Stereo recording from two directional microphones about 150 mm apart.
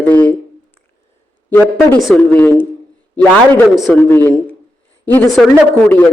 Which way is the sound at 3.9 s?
15° left (ahead or behind).